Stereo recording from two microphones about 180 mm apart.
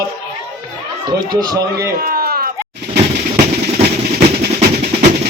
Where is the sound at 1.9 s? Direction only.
55° right (ahead or behind).